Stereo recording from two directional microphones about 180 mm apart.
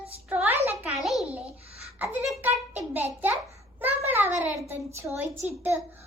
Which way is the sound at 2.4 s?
10° right (ahead or behind).